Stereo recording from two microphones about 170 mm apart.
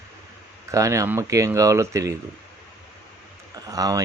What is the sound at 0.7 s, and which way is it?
Speech, 20° right (ahead or behind).